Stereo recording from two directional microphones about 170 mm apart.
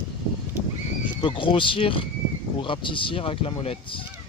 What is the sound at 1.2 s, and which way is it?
Speech, 30° left (ahead or behind).